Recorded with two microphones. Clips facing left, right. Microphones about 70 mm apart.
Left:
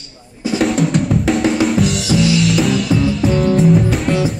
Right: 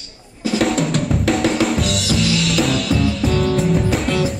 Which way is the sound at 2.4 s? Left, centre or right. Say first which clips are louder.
Left 3 dB; centre.